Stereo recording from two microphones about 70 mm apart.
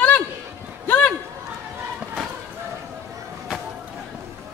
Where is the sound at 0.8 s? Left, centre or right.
Left.